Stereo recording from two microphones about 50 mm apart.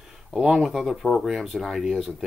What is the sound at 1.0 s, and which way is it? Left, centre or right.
Speech, centre.